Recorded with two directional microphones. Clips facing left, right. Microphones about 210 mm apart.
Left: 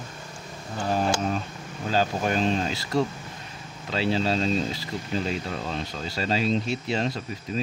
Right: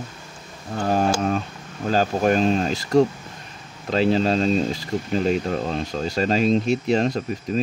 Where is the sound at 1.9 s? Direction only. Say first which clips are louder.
Right 5 dB; 45° right (ahead or behind).